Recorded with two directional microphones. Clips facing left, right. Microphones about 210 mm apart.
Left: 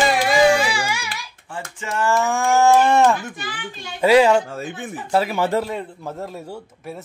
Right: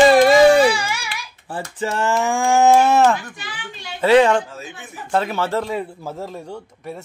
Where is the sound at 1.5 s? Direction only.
30° right (ahead or behind).